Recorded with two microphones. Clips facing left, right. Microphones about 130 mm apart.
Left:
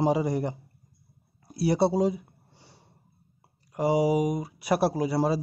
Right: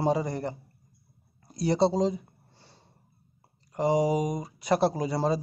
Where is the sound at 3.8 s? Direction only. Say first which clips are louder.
Left 1 dB; 5° left (ahead or behind).